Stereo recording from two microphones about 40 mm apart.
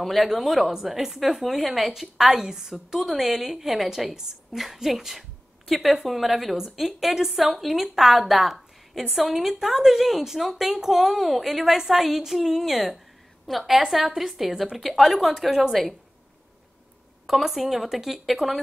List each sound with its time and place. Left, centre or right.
0.0 s a woman's voice: centre
17.3 s a woman's voice: centre